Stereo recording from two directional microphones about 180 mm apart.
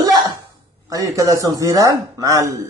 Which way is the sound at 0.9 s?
20° right (ahead or behind).